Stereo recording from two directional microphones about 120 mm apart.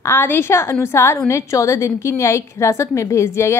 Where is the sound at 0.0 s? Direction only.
20° left (ahead or behind).